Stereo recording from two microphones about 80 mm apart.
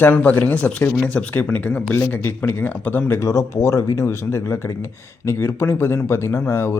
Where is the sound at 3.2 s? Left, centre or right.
Left.